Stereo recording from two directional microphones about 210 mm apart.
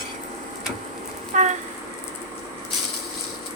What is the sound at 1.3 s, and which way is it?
Train, 35° right (ahead or behind).